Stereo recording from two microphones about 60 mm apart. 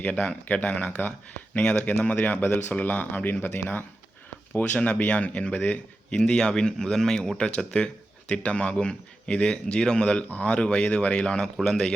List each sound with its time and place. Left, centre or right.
0.0 s speech: left
6.1 s speech: centre